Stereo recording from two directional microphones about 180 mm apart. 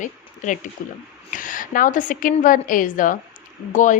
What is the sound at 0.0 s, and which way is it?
Speech, 45° left (ahead or behind).